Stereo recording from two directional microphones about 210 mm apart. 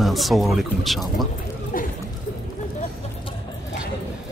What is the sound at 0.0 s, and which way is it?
A man's voice, centre (ahead or behind).